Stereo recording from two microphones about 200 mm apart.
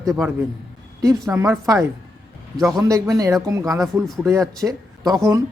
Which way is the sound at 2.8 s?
15° right (ahead or behind).